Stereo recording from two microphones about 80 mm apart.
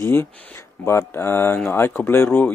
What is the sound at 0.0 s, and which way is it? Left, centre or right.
Speech, left.